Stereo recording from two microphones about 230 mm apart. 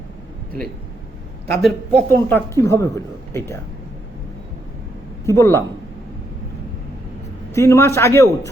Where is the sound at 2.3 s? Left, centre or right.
Centre.